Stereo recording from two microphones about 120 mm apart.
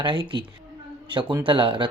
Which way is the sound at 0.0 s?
40° right (ahead or behind).